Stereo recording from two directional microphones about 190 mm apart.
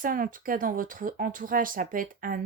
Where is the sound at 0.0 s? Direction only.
45° right (ahead or behind).